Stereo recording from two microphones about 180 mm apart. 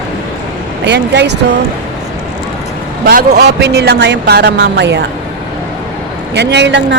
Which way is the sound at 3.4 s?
65° right (ahead or behind).